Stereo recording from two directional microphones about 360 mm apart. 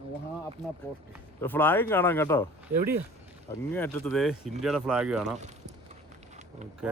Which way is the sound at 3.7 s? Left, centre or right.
Centre.